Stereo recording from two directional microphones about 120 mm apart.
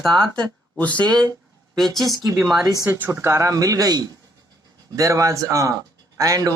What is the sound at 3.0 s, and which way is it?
A man's voice, 20° right (ahead or behind).